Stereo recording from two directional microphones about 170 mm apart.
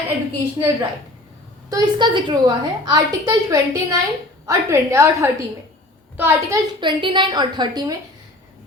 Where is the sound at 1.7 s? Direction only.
25° right (ahead or behind).